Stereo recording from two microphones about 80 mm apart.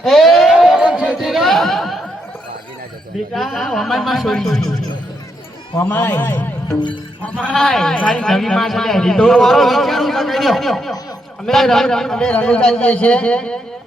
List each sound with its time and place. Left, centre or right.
0.0 s a sound: centre
3.3 s a man's voice: centre
6.1 s a man's voice: left
7.5 s a man's voice: centre